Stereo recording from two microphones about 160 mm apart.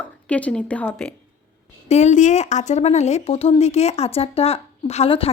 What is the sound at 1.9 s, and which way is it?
Speech, 45° left (ahead or behind).